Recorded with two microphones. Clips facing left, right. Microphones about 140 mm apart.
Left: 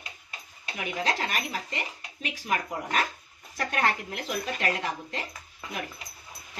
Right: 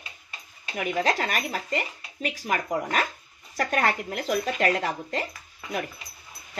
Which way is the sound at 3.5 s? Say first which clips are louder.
Right 3 dB; 45° right (ahead or behind).